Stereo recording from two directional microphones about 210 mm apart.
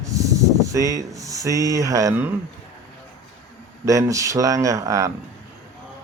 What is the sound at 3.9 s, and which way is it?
Speech, 15° right (ahead or behind).